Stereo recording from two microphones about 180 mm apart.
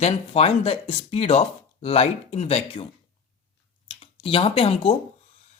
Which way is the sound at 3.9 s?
30° left (ahead or behind).